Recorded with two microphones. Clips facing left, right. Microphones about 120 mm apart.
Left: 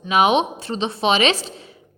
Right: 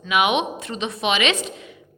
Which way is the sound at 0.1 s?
35° left (ahead or behind).